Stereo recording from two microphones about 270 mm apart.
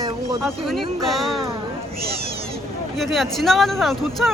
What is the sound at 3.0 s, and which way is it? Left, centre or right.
Speech, centre.